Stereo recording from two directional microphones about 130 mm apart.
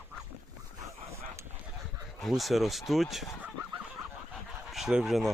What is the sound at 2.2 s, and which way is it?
Speech, centre (ahead or behind).